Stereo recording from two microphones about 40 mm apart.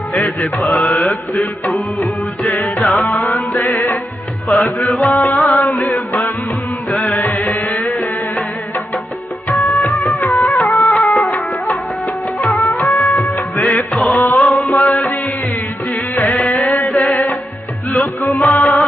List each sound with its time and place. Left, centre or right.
0.1 s music: left
7.2 s music: left
9.5 s music: left
12.4 s music of bollywood: left
13.9 s mantra: centre
14.2 s music: left
16.3 s music: left